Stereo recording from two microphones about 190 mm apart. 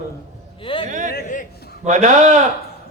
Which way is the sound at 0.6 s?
25° left (ahead or behind).